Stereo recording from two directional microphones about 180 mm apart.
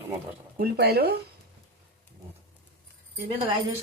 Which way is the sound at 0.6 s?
65° right (ahead or behind).